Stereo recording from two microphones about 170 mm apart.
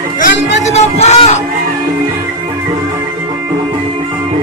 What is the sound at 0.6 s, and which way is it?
Music, 40° left (ahead or behind).